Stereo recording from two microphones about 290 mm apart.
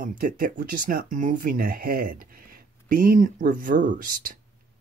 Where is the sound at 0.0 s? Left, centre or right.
Right.